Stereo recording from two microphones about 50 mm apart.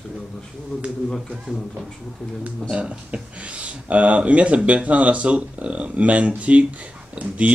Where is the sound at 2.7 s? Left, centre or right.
Right.